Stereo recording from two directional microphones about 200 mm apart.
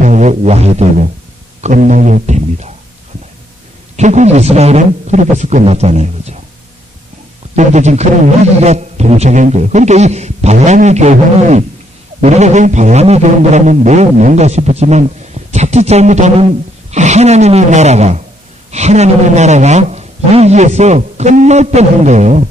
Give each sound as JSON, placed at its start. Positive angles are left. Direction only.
{"t": 0.0, "sound": "music", "side_deg": -35}
{"t": 1.6, "sound": "a man's voice", "side_deg": -40}
{"t": 3.9, "sound": "a man's voice", "side_deg": -35}
{"t": 7.5, "sound": "a man's voice", "side_deg": -35}